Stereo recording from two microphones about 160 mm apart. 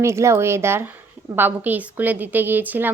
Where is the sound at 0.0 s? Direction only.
15° right (ahead or behind).